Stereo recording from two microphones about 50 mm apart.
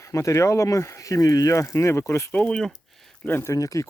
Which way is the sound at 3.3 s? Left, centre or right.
Left.